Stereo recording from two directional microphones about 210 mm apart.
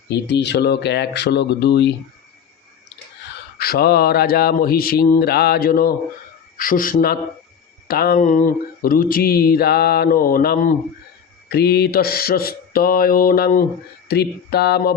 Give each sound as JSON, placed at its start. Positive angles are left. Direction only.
{"t": 0.1, "sound": "speech", "side_deg": 55}
{"t": 3.6, "sound": "speech", "side_deg": 45}